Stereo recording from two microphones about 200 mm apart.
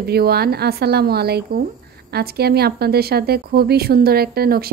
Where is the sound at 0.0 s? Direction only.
50° right (ahead or behind).